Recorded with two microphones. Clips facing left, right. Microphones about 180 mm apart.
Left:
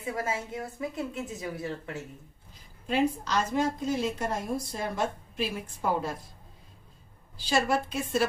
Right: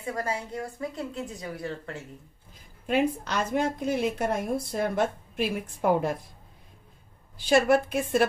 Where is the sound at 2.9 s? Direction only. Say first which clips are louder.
Right 1 dB; 55° right (ahead or behind).